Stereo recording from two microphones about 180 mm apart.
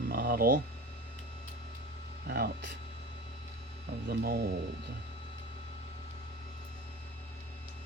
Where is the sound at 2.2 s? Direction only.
55° right (ahead or behind).